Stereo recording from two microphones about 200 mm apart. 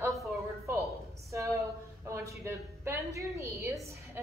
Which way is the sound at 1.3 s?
15° right (ahead or behind).